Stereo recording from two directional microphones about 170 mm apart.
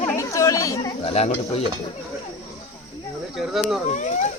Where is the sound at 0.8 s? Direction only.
35° left (ahead or behind).